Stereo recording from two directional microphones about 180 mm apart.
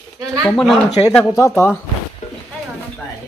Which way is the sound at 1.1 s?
15° left (ahead or behind).